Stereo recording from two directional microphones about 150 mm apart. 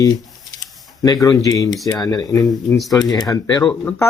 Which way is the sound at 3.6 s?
10° left (ahead or behind).